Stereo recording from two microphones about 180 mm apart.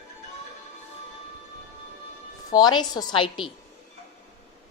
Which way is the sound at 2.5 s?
25° left (ahead or behind).